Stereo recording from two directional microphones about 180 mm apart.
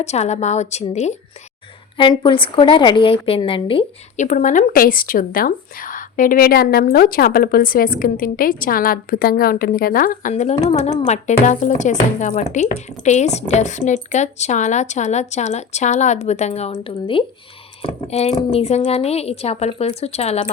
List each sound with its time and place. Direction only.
0.0 s speech: 35° left (ahead or behind)
2.0 s a woman's voice: 25° left (ahead or behind)
4.3 s speech: 45° left (ahead or behind)